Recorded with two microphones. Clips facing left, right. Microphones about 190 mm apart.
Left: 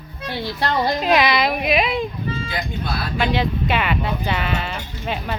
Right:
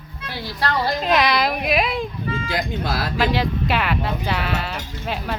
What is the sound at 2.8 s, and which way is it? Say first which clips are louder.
Speech: right 2 dB; 90° right.